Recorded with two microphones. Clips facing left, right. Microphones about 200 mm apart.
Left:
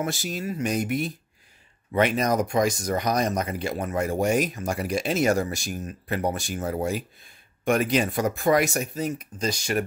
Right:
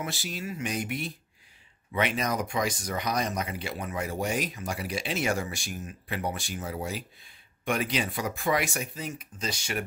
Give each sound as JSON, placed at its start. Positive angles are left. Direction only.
{"t": 0.0, "sound": "speech", "side_deg": 45}